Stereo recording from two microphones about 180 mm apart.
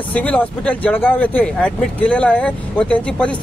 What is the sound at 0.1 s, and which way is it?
Speech, 10° left (ahead or behind).